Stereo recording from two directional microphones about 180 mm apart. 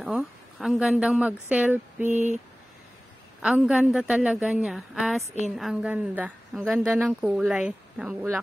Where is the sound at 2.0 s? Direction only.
40° right (ahead or behind).